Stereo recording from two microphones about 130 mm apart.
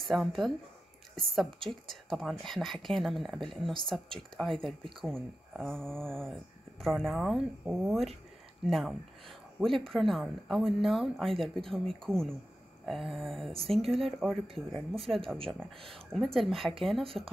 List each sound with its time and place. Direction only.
0.0 s speech: centre (ahead or behind)
15.3 s speech: 45° right (ahead or behind)
15.9 s speech: centre (ahead or behind)